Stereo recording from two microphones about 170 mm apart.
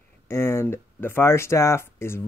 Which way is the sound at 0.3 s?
15° left (ahead or behind).